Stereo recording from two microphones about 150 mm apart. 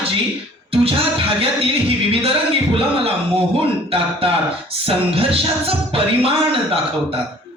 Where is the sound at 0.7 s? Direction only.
40° right (ahead or behind).